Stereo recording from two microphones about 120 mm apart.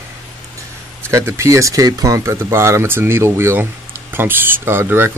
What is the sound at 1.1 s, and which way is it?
Speech, 25° right (ahead or behind).